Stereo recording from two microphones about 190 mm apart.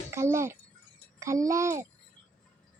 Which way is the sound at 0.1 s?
15° right (ahead or behind).